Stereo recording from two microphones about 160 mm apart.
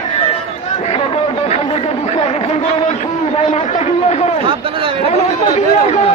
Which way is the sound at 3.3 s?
45° left (ahead or behind).